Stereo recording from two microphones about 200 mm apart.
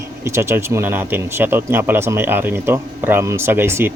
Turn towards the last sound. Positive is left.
turn(degrees=-10)  # may be behind; listen again after turning